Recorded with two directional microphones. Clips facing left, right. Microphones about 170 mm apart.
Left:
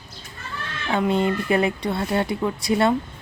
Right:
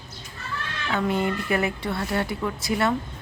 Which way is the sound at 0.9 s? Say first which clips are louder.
Left 4 dB; 25° left (ahead or behind).